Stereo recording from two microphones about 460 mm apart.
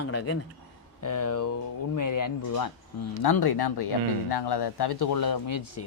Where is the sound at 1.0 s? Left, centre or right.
Left.